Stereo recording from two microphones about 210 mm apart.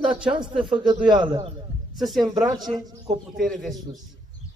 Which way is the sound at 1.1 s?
20° right (ahead or behind).